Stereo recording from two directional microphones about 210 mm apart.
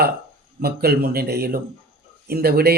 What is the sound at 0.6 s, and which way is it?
Speech, 45° right (ahead or behind).